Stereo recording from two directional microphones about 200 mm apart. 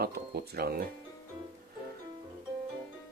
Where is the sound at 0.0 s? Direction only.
50° right (ahead or behind).